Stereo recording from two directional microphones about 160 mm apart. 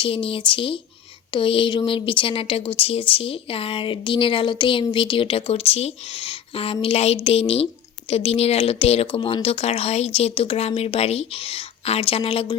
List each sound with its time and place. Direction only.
0.0 s speech: 35° left (ahead or behind)